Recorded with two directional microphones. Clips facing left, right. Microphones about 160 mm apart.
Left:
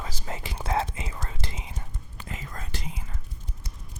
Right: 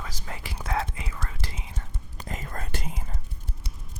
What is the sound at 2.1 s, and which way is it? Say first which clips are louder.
Whispering: right 3 dB; 40° right (ahead or behind).